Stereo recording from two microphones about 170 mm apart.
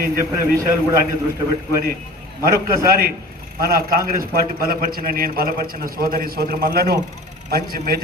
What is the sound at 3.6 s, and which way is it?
A man's voice, 60° right (ahead or behind).